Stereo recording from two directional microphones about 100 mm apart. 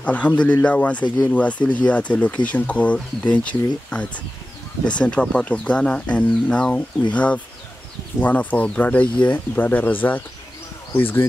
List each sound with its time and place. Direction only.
0.0 s speech: 15° left (ahead or behind)
1.0 s speech: 40° left (ahead or behind)
1.3 s speech: 15° left (ahead or behind)